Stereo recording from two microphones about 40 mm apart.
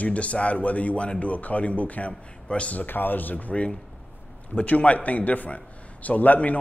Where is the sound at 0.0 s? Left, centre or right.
Left.